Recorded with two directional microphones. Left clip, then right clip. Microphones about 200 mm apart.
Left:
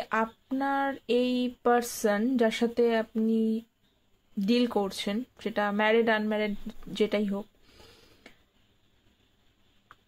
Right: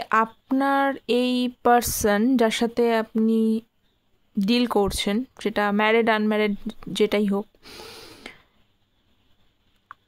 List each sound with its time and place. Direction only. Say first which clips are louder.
0.0 s speech: right 8 dB; 35° right (ahead or behind)